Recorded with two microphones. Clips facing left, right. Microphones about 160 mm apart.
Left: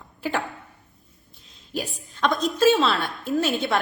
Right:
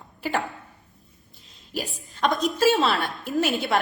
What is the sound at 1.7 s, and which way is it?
A woman's voice, centre (ahead or behind).